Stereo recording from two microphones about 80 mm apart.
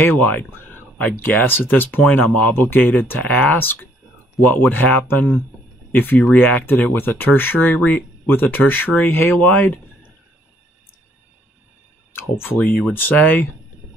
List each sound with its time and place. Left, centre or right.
0.0 s speech: left
12.1 s speech: left